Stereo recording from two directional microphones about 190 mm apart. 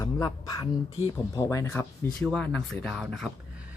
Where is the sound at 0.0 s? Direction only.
20° left (ahead or behind); by 3.2 s centre (ahead or behind).